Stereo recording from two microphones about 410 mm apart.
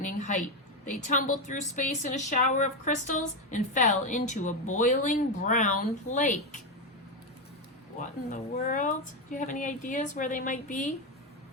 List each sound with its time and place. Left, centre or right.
0.0 s a sound: centre
0.9 s a woman's voice: centre
7.9 s a woman's voice: centre